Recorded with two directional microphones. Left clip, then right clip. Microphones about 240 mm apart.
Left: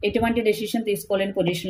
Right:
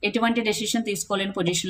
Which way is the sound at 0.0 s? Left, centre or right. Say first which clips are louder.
Left 2 dB; centre.